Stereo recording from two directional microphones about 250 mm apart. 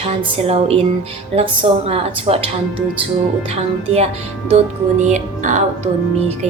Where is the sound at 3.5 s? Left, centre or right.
Right.